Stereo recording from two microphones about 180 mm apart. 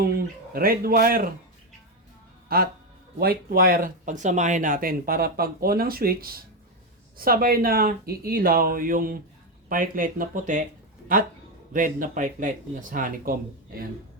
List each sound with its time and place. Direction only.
0.0 s speech: 60° right (ahead or behind)
2.5 s a man's voice: 55° right (ahead or behind)